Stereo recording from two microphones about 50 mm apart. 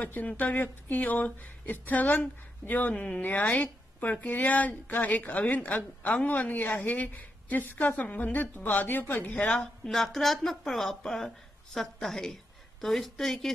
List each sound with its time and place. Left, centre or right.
0.0 s a woman's voice: left
9.3 s a woman's voice: left
9.8 s a woman's voice: centre